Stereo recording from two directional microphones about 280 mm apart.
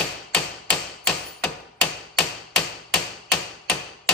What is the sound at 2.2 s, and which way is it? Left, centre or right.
Hammer, centre.